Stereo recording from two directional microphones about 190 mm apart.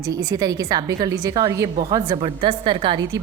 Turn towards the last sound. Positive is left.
turn(degrees=-25)  # may be behind; listen again after turning